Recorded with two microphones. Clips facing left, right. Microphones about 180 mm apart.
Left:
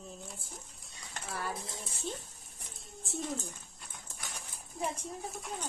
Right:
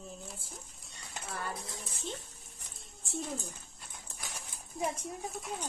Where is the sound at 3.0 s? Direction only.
Centre (ahead or behind).